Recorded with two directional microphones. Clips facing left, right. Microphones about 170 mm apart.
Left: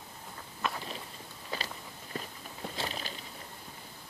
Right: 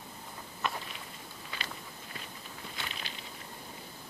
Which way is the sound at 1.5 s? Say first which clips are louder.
Left 6 dB; 40° left (ahead or behind).